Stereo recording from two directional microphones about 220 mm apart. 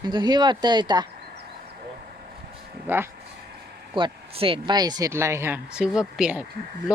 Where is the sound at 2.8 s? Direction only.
10° right (ahead or behind).